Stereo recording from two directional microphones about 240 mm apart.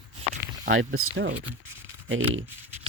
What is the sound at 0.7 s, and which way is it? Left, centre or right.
Speech, right.